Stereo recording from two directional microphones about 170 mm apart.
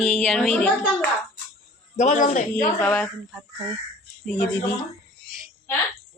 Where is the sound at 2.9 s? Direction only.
Centre (ahead or behind).